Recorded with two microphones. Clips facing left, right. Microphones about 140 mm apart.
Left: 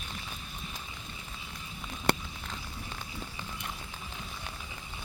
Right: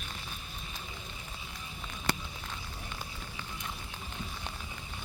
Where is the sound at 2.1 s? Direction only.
60° left (ahead or behind).